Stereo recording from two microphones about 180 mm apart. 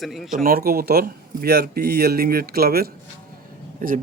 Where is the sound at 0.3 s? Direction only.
55° right (ahead or behind).